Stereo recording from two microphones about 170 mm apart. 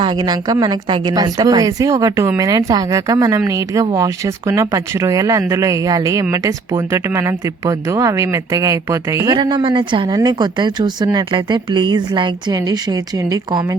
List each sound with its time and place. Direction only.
0.0 s a woman's voice: 25° right (ahead or behind)